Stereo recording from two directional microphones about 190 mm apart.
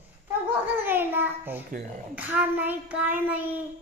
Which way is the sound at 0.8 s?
10° right (ahead or behind).